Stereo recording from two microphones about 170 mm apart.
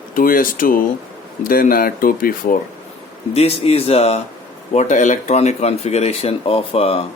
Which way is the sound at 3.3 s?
35° left (ahead or behind).